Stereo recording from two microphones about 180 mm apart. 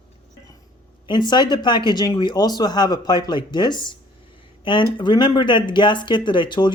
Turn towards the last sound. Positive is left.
turn(degrees=25)  # may be behind; listen again after turning